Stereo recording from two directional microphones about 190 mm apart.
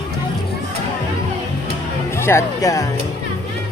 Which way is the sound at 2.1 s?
15° left (ahead or behind).